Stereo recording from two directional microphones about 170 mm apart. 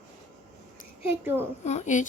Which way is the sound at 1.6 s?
45° left (ahead or behind).